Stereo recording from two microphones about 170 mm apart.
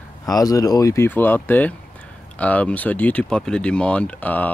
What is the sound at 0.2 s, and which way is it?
Speech, 20° left (ahead or behind).